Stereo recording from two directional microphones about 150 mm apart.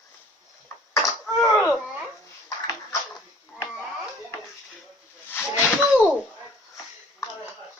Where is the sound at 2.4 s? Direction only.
20° left (ahead or behind).